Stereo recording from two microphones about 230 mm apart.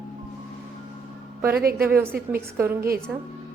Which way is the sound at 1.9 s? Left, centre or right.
Centre.